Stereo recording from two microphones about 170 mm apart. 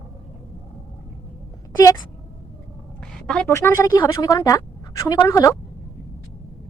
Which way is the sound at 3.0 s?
5° left (ahead or behind).